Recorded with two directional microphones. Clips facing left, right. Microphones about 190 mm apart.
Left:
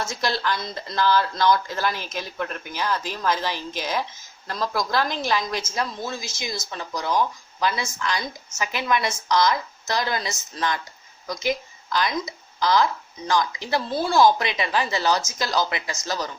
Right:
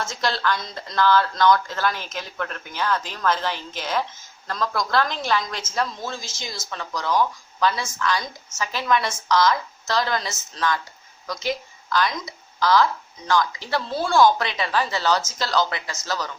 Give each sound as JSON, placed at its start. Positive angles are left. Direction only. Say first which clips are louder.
{"t": 0.0, "sound": "speech", "louder": "right 1 dB", "side_deg": 10}